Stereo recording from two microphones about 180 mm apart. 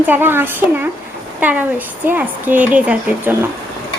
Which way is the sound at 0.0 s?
10° right (ahead or behind).